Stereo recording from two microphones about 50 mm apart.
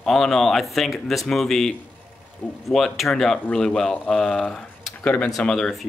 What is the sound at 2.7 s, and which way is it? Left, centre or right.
Speech, centre.